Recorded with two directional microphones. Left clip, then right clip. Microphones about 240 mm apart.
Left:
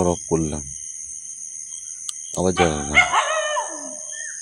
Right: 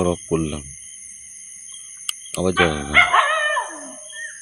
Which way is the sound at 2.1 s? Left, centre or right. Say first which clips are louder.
Even; centre.